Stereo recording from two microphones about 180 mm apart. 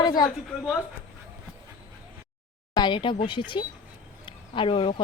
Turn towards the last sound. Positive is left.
turn(degrees=30)  # may be behind; listen again after turning